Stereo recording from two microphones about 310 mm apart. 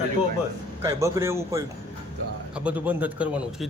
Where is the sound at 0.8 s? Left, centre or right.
Centre.